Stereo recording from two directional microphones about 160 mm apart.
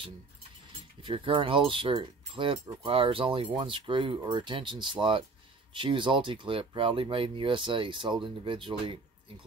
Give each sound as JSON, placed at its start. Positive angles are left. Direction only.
{"t": 1.0, "sound": "speech", "side_deg": -35}